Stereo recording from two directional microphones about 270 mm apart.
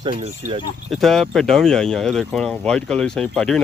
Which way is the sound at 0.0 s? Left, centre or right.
Right.